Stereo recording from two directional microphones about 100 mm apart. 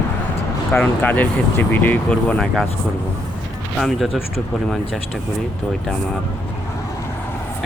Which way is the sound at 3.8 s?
Centre (ahead or behind).